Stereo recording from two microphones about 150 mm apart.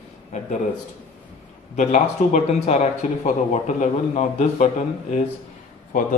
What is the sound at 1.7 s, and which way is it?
Speech, 55° left (ahead or behind).